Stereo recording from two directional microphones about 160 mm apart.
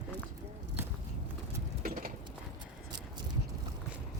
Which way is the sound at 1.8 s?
60° right (ahead or behind).